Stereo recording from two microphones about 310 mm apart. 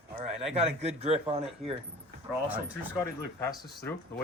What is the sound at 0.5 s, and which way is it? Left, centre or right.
Speech, centre.